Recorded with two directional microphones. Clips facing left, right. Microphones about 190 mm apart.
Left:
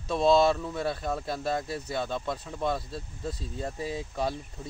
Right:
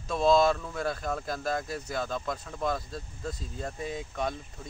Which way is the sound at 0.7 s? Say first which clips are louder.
Left 1 dB; 25° left (ahead or behind).